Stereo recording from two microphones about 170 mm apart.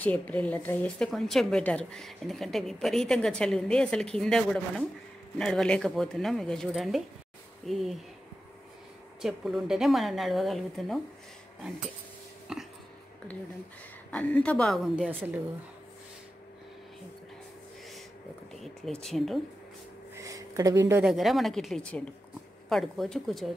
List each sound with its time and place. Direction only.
0.0 s a woman's voice: 10° left (ahead or behind)
9.2 s a woman's voice: centre (ahead or behind)
12.5 s a sound: centre (ahead or behind)
14.1 s a woman's voice: 5° left (ahead or behind)
15.0 s a woman's voice: 10° right (ahead or behind)
18.6 s a woman's voice: centre (ahead or behind)
20.2 s a sound: 20° right (ahead or behind)
21.0 s a woman's voice: centre (ahead or behind)